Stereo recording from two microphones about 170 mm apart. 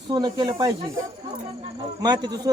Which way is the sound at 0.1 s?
25° right (ahead or behind).